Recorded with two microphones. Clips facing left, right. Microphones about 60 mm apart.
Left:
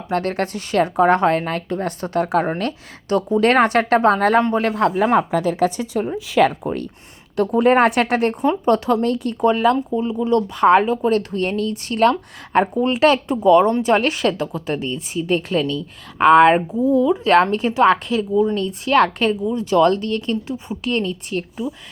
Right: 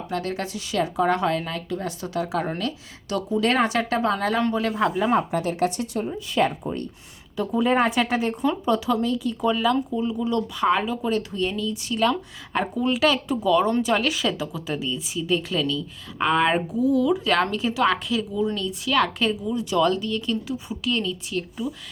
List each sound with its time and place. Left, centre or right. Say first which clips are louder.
0.1 s a woman's voice: left 8 dB; left
6.1 s speech: left 7 dB; left
7.3 s a woman's voice: left 6 dB; left
9.9 s a woman's voice: left 6 dB; left
16.6 s speech: left 4 dB; left
17.5 s a woman's voice: left 7 dB; left